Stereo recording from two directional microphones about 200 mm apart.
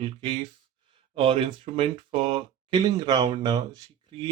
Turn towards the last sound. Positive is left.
turn(degrees=-25)  # may be behind; listen again after turning